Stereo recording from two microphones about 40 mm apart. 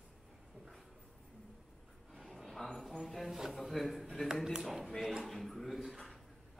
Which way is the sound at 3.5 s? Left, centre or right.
Centre.